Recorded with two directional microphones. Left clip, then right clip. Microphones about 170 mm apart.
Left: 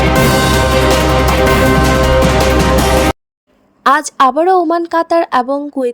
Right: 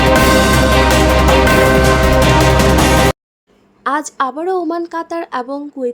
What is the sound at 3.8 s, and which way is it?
A woman's voice, 35° left (ahead or behind).